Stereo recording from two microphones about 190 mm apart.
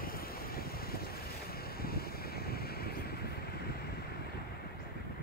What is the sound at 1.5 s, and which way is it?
Wind, 55° left (ahead or behind).